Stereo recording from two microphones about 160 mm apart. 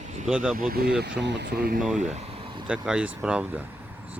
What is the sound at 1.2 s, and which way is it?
Speech, 90° right.